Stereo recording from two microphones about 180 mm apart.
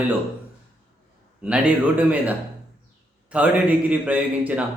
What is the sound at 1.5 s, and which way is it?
Speech, 5° right (ahead or behind).